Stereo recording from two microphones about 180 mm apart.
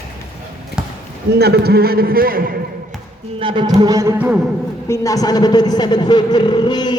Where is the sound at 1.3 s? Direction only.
65° right (ahead or behind).